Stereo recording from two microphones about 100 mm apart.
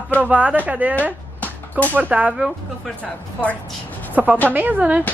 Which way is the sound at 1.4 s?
15° left (ahead or behind).